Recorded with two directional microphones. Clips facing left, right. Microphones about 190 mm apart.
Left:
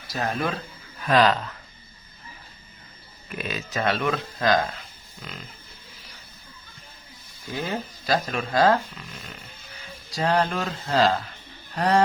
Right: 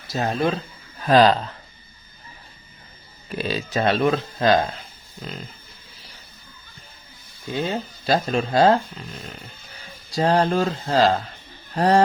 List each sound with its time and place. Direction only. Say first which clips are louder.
0.1 s speech: right 5 dB; 25° right (ahead or behind)
3.2 s speech: right 6 dB; 30° right (ahead or behind)
7.5 s speech: right 4 dB; 20° right (ahead or behind)